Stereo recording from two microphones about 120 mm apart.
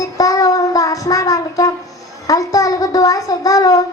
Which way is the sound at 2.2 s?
30° left (ahead or behind).